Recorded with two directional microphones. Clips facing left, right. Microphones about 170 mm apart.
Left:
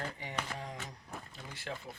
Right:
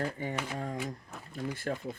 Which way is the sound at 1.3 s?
50° right (ahead or behind).